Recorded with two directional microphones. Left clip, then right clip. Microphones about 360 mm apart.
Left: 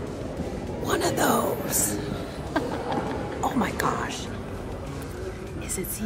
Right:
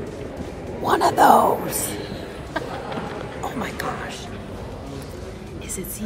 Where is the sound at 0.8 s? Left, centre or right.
Centre.